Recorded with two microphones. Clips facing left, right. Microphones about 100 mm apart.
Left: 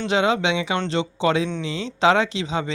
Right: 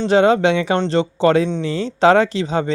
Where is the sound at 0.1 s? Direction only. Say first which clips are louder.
Right 7 dB; 40° right (ahead or behind).